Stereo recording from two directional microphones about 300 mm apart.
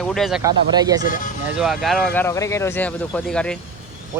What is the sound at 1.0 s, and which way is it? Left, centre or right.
Speech, left.